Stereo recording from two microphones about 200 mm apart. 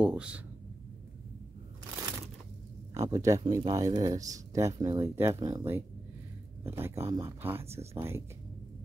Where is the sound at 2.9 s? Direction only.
15° right (ahead or behind).